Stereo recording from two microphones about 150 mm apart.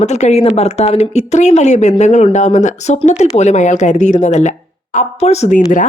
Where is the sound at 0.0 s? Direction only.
50° left (ahead or behind).